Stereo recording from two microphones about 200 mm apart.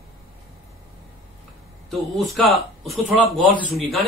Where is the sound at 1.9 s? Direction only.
Centre (ahead or behind).